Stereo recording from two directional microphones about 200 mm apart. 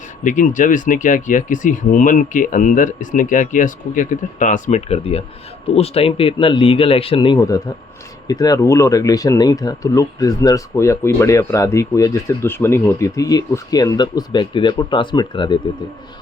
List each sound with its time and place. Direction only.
0.3 s speech: 40° left (ahead or behind); by 15.5 s 20° left (ahead or behind)